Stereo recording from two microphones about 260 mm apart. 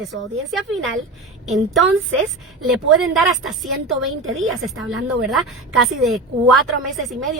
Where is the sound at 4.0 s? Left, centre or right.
Right.